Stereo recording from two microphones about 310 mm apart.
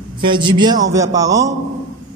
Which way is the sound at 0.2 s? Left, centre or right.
Centre.